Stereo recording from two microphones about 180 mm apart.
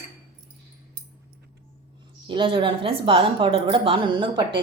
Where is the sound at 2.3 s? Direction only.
25° right (ahead or behind).